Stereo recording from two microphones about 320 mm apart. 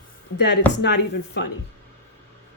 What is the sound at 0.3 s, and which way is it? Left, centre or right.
Speech, left.